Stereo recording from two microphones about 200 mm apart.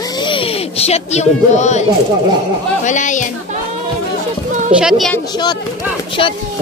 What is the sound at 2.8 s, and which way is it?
Speech, 40° left (ahead or behind).